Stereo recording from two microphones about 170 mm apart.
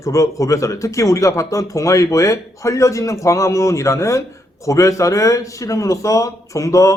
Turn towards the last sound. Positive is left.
turn(degrees=20)  # may be behind; listen again after turning